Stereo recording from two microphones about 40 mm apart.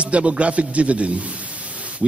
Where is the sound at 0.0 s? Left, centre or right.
Right.